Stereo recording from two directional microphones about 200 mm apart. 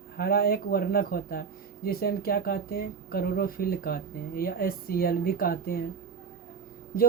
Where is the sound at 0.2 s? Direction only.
50° left (ahead or behind).